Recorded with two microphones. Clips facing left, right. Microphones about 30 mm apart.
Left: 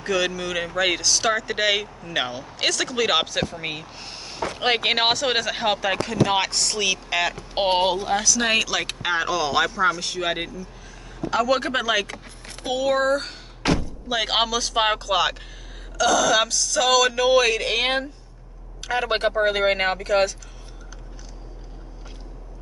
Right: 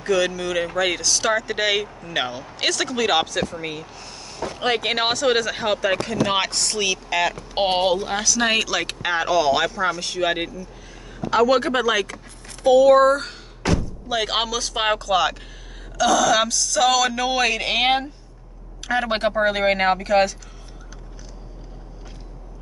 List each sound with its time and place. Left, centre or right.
0.0 s speech: centre
3.3 s speech: centre
3.9 s a sound: left
4.6 s speech: left
6.2 s speech: centre
8.1 s a man's voice: centre
11.7 s speech: centre
13.6 s door: left
14.0 s speech: centre
17.6 s speech: right
18.8 s speech: centre